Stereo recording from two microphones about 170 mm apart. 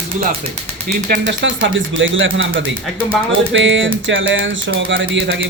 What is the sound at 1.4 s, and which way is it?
Speech, 90° right.